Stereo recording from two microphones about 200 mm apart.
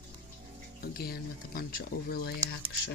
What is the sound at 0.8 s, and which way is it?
Speech, 50° left (ahead or behind).